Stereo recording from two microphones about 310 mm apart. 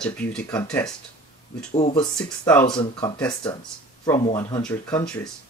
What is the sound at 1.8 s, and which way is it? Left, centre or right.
Speech, centre.